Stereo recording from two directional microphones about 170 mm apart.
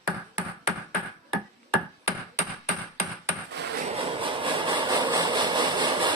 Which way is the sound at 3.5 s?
80° right.